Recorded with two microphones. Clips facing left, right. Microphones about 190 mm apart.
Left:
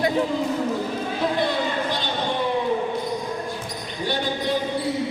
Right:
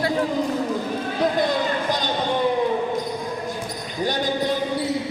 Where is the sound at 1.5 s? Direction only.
45° right (ahead or behind).